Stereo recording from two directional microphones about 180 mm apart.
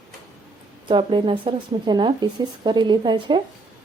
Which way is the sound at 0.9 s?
25° right (ahead or behind).